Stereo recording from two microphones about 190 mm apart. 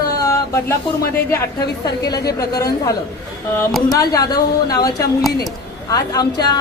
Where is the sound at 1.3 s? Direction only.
20° left (ahead or behind).